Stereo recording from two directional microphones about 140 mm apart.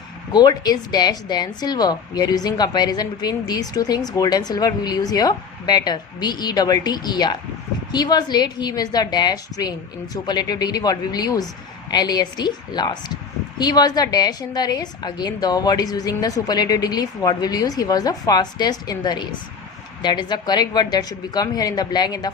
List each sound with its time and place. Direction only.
0.3 s a woman's voice: 30° left (ahead or behind)